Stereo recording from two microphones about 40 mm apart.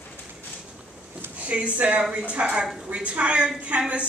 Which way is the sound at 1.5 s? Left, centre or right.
Right.